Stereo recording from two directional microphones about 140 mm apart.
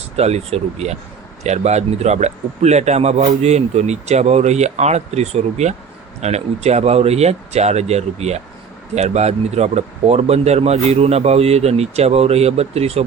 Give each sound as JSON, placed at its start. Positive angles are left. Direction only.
{"t": 0.2, "sound": "a man's voice", "side_deg": -50}